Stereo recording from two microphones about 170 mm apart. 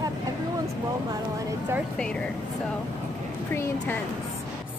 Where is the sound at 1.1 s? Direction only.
20° right (ahead or behind).